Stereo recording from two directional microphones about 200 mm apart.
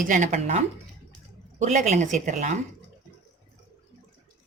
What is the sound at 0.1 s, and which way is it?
A woman's voice, 40° right (ahead or behind).